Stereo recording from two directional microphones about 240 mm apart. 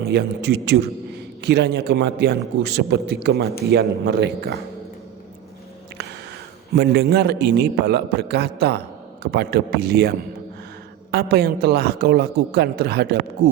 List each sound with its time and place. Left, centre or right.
0.0 s a man's voice: right
6.7 s a man's voice: right